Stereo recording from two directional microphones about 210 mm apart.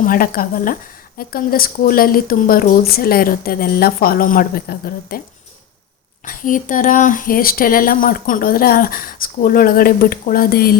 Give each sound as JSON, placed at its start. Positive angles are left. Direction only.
{"t": 0.0, "sound": "speech", "side_deg": 45}
{"t": 6.2, "sound": "speech", "side_deg": 40}